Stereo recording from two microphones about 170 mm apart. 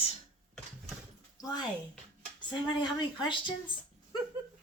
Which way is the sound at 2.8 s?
25° left (ahead or behind).